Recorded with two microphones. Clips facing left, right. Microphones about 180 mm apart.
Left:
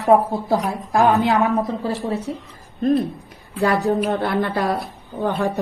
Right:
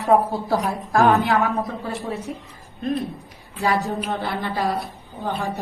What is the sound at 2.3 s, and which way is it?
Speech, 30° left (ahead or behind).